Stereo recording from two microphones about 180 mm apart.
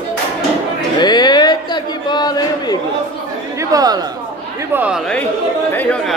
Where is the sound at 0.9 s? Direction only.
25° left (ahead or behind).